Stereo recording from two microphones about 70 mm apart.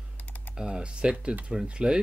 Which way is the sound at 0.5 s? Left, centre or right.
Centre.